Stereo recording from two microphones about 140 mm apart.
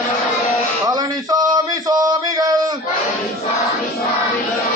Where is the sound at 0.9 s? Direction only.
30° right (ahead or behind).